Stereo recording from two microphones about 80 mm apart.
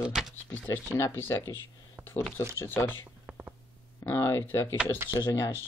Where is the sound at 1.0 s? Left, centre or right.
Left.